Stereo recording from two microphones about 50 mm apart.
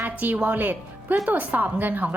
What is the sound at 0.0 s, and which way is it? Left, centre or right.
Music, right.